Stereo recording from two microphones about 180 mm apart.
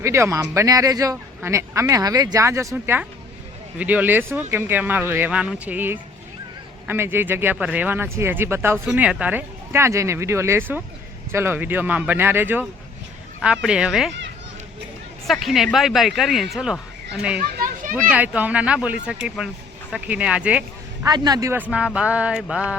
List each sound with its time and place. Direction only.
0.0 s speech: 15° right (ahead or behind)
15.3 s speech: centre (ahead or behind)
17.5 s children playing: 50° right (ahead or behind)
18.1 s speech: 10° right (ahead or behind)
21.0 s speech: 20° right (ahead or behind); by 22.6 s 5° right (ahead or behind)